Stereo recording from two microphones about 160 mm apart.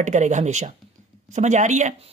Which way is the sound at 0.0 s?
50° right (ahead or behind).